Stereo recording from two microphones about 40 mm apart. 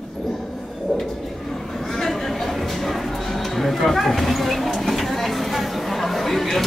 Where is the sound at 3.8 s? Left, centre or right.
Centre.